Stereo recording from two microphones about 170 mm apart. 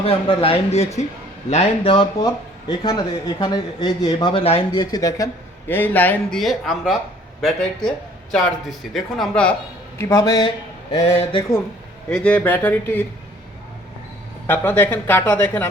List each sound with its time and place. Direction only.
0.0 s speech: 35° left (ahead or behind)
2.2 s speech: 20° left (ahead or behind)
4.9 s speech: 20° left (ahead or behind)
6.4 s speech: centre (ahead or behind)
10.0 s speech: 20° left (ahead or behind)
10.9 s speech: 35° left (ahead or behind)
12.0 s speech: 5° left (ahead or behind)
14.4 s speech: 10° left (ahead or behind)